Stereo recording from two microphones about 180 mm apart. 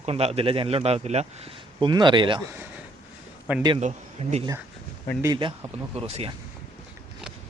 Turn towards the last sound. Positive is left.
turn(degrees=-35)  # may be behind; listen again after turning